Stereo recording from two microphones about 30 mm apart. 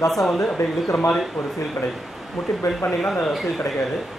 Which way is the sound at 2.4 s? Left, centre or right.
Centre.